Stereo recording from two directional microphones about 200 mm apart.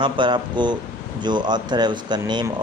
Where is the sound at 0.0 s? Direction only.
25° right (ahead or behind).